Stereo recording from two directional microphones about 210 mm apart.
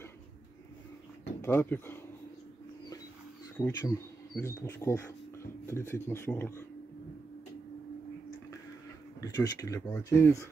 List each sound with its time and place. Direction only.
1.4 s speech: 10° left (ahead or behind)
3.5 s speech: 15° left (ahead or behind)
9.2 s speech: 20° left (ahead or behind)